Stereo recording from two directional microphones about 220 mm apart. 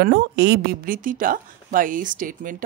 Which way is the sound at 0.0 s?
50° right (ahead or behind).